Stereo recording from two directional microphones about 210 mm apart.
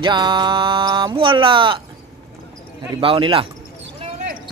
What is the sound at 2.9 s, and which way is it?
Mantra, 25° right (ahead or behind).